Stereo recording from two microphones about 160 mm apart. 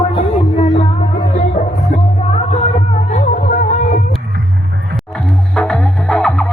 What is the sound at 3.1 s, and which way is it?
Music, 55° left (ahead or behind).